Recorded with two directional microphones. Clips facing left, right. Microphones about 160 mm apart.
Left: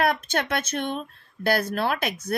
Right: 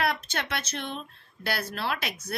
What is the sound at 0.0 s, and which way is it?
Speech, 50° left (ahead or behind).